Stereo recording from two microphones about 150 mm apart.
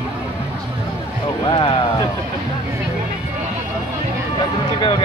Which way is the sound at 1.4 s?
35° left (ahead or behind).